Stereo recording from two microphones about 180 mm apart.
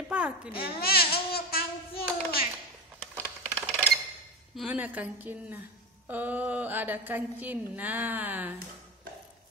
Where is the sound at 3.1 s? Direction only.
10° right (ahead or behind).